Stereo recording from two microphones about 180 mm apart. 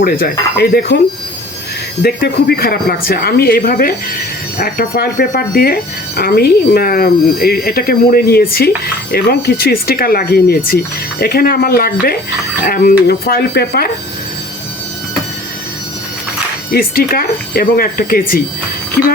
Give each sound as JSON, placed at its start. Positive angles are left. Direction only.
{"t": 0.0, "sound": "speech", "side_deg": 55}
{"t": 2.0, "sound": "speech", "side_deg": 60}
{"t": 16.7, "sound": "speech", "side_deg": 55}